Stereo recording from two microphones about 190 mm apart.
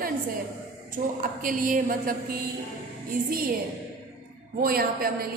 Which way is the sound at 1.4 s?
45° right (ahead or behind).